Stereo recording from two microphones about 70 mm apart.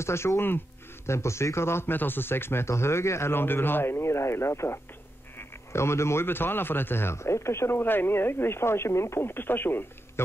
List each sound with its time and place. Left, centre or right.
0.0 s a man's voice: left